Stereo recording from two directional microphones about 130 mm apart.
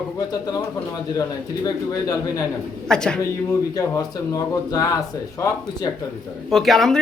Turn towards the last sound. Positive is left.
turn(degrees=0)  # may be behind; listen again after turning